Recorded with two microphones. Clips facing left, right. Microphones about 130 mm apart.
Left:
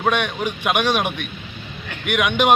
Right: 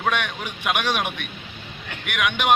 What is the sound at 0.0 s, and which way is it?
A man's voice, 25° left (ahead or behind).